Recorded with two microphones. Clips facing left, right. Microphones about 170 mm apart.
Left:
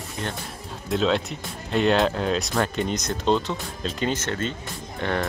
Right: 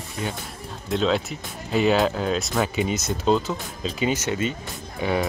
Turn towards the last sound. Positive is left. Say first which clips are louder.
# right 2 dB
turn(degrees=-5)  # may be behind; listen again after turning